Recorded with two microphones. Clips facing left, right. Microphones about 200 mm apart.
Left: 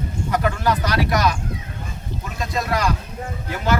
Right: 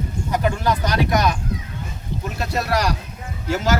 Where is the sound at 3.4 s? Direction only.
90° right.